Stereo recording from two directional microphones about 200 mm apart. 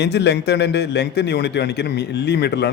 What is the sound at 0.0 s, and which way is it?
A man's voice, 55° left (ahead or behind).